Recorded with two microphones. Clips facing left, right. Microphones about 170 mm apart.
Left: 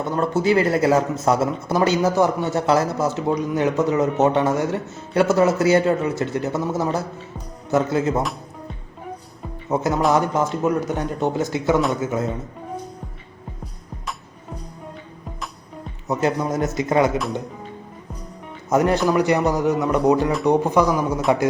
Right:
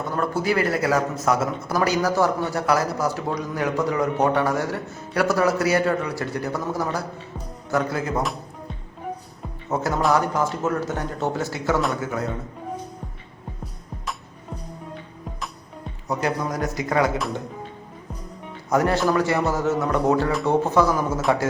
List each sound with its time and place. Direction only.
0.0 s a man's voice: 25° left (ahead or behind)
9.6 s a man's voice: 15° left (ahead or behind)
16.0 s a man's voice: 25° left (ahead or behind)
18.7 s speech: 20° left (ahead or behind)